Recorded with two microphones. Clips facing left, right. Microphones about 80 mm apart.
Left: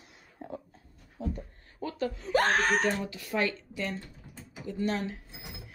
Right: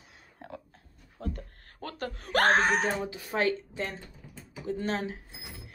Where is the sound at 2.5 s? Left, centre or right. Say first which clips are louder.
Right 2 dB; right.